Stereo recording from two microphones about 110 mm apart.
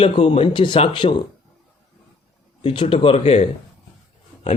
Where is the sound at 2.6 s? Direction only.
55° left (ahead or behind); by 3.4 s 75° left (ahead or behind).